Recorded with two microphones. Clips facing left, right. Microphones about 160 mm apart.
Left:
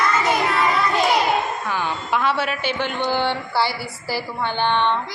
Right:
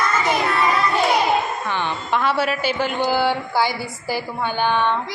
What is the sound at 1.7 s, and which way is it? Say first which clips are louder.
A woman's voice: right 1 dB; 5° left (ahead or behind).